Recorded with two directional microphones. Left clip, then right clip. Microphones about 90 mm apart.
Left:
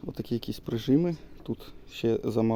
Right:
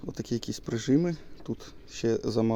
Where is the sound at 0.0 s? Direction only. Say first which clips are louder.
Even; 35° left (ahead or behind).